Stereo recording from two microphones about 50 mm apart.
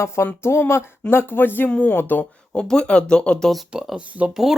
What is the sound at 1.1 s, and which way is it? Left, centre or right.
Speech, left.